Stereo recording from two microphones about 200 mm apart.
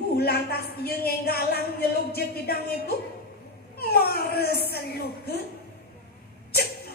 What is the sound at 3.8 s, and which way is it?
Speech, 50° left (ahead or behind).